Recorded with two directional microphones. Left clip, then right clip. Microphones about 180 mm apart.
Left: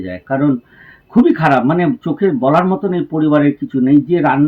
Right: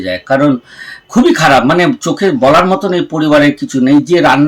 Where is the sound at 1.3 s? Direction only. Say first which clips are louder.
Right 5 dB; 30° right (ahead or behind).